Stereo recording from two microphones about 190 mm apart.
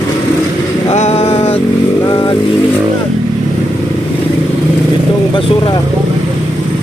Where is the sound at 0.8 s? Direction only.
35° left (ahead or behind).